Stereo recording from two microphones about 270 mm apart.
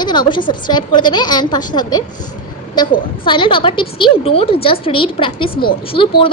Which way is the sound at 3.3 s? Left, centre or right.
Centre.